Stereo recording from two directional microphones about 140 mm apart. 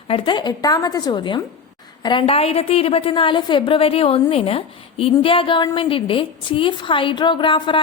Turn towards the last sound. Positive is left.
turn(degrees=35)  # may be behind; listen again after turning